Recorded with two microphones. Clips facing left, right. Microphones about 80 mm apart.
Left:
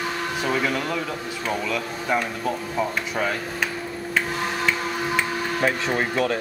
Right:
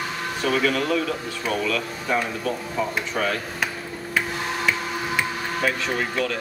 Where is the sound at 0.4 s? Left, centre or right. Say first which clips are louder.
Right 3 dB; centre.